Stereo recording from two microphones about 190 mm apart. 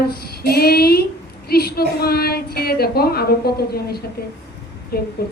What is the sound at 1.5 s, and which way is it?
A woman's voice, 55° left (ahead or behind).